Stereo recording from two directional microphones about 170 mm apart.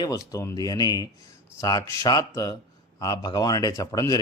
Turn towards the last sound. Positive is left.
turn(degrees=20)  # may be behind; listen again after turning